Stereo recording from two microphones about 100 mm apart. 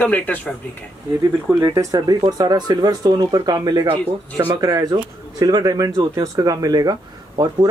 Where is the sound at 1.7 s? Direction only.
35° right (ahead or behind).